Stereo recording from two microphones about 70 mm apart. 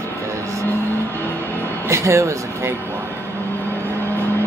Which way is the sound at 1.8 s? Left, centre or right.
Right.